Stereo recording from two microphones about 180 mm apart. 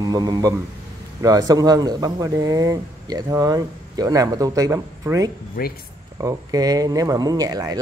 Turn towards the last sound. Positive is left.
turn(degrees=-20)  # may be behind; listen again after turning